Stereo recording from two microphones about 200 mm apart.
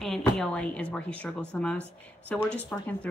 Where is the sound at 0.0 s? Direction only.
Centre (ahead or behind).